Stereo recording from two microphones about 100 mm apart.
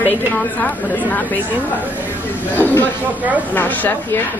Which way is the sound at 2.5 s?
20° left (ahead or behind).